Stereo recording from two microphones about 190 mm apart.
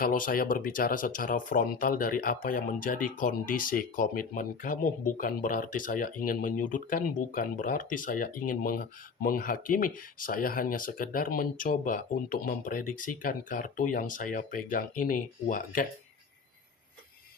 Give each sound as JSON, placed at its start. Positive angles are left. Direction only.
{"t": 0.0, "sound": "speech", "side_deg": 45}